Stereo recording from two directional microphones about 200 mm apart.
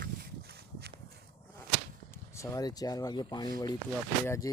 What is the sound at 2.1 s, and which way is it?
Speech, 15° left (ahead or behind).